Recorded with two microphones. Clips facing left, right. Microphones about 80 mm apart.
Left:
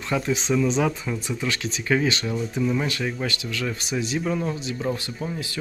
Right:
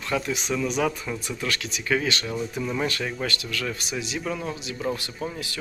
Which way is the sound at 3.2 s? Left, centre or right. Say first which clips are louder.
Left 1 dB; left.